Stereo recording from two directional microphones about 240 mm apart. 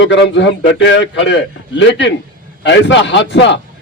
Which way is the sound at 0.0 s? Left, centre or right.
Left.